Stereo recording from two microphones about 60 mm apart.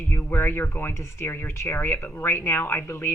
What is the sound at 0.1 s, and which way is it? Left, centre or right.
Speech, left.